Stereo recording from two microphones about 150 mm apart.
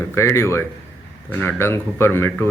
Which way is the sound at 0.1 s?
15° left (ahead or behind).